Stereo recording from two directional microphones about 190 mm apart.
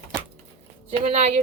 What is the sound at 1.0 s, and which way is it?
Speech, 35° right (ahead or behind).